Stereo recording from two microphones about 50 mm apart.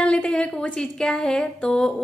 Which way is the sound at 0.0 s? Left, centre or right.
Centre.